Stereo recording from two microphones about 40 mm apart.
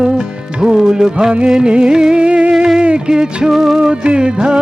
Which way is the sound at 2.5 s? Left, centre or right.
Centre.